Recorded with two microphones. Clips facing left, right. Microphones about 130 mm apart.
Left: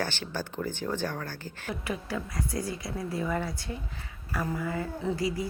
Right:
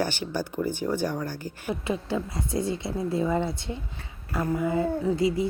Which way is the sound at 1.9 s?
25° right (ahead or behind).